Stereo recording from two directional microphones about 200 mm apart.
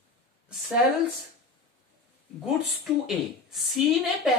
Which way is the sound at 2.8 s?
Centre (ahead or behind).